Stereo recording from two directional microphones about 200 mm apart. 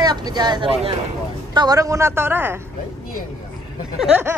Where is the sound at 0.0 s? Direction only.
20° right (ahead or behind).